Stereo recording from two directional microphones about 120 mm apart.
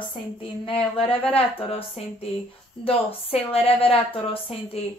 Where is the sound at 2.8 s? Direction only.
55° left (ahead or behind).